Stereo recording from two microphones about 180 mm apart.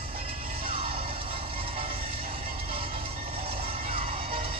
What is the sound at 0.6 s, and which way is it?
Music, 30° right (ahead or behind).